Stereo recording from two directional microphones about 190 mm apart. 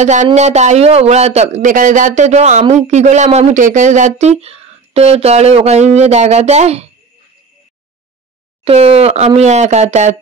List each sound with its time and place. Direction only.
0.0 s speech: 40° right (ahead or behind)
8.6 s speech: 30° right (ahead or behind)